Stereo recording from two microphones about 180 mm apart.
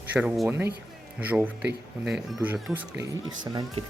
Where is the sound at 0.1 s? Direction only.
5° right (ahead or behind).